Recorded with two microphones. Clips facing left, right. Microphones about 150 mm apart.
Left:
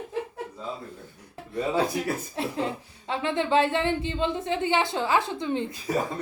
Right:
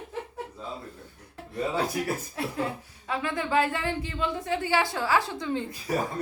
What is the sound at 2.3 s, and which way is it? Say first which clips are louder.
A woman's voice: left 2 dB; 25° left (ahead or behind).